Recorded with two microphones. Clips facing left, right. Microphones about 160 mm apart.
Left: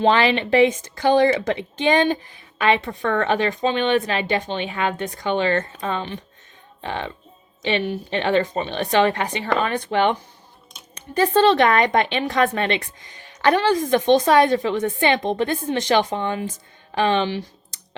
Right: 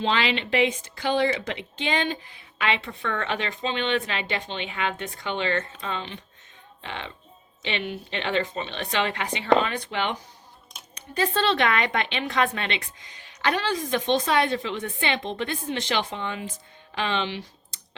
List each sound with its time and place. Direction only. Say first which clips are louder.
0.0 s speech: left 7 dB; 50° left (ahead or behind)
2.6 s speech: left 7 dB; 45° left (ahead or behind)